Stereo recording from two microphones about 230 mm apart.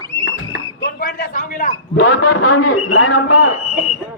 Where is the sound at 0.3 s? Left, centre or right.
Left.